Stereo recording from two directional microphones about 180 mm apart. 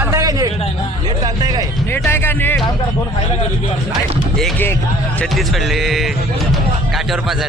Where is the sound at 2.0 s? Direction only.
10° left (ahead or behind).